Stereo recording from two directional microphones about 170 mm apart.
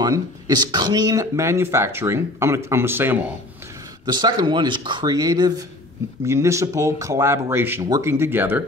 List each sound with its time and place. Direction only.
0.0 s speech: 25° right (ahead or behind)
4.0 s speech: 25° right (ahead or behind)